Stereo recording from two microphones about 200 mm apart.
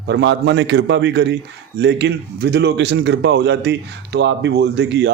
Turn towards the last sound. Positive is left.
turn(degrees=-60)  # may be behind; listen again after turning